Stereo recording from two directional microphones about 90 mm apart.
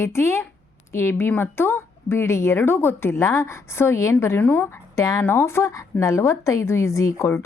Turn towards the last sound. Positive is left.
turn(degrees=30)  # may be behind; listen again after turning